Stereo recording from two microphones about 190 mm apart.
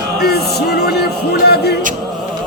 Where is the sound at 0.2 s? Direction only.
55° left (ahead or behind).